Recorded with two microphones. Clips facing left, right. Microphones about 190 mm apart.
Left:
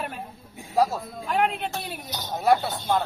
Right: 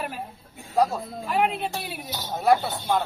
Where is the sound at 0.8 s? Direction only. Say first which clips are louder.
Even; centre (ahead or behind).